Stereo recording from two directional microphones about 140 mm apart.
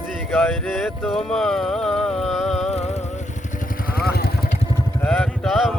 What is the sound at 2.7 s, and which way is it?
Vehicle, 50° left (ahead or behind).